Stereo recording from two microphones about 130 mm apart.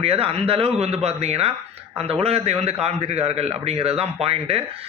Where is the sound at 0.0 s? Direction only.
50° right (ahead or behind).